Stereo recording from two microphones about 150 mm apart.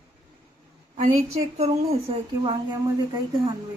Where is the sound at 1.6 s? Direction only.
40° right (ahead or behind).